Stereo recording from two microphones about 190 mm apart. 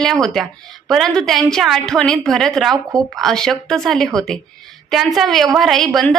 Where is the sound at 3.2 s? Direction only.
5° left (ahead or behind).